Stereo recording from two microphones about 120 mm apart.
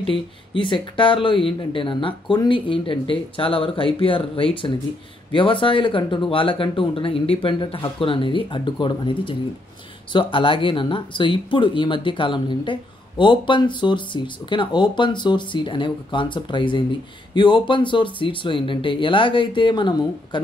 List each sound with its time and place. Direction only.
0.0 s speech: 45° left (ahead or behind)